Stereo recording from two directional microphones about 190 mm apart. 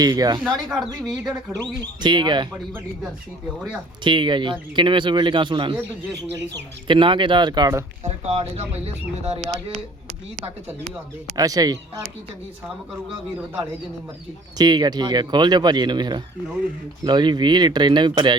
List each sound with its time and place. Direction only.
0.0 s speech: 20° right (ahead or behind)
1.0 s speech: 5° right (ahead or behind)
2.0 s speech: 25° right (ahead or behind)
4.0 s speech: 25° right (ahead or behind)
6.8 s speech: 25° right (ahead or behind)
8.0 s speech: 35° right (ahead or behind)
11.3 s speech: 20° right (ahead or behind)
14.6 s speech: 20° right (ahead or behind)